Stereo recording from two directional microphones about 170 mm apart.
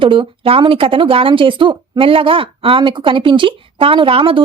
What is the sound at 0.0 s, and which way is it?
A woman's voice, 30° right (ahead or behind).